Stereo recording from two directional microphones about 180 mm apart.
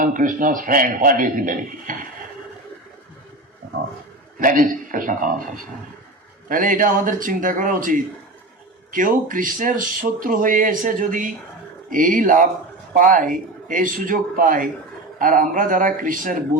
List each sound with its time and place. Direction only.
0.0 s speech: 50° right (ahead or behind)
4.4 s speech: 50° right (ahead or behind)
6.5 s speech: 50° right (ahead or behind)